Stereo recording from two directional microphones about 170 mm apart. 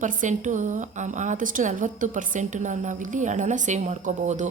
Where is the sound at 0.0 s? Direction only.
50° right (ahead or behind).